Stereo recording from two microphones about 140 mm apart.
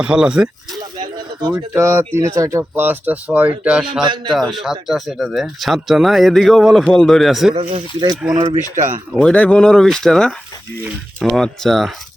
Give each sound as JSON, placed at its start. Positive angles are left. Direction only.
{"t": 0.0, "sound": "speech", "side_deg": -5}
{"t": 8.7, "sound": "speech", "side_deg": -65}
{"t": 9.1, "sound": "speech", "side_deg": 10}